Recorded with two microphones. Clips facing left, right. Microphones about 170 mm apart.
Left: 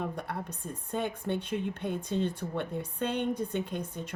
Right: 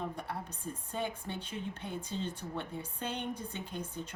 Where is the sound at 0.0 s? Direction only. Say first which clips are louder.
Left 4 dB; 60° left (ahead or behind).